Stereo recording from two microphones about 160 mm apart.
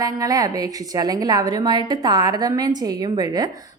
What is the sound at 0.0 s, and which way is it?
A woman's voice, 20° right (ahead or behind).